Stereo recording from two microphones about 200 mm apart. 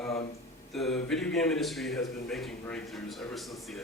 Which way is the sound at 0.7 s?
Centre (ahead or behind).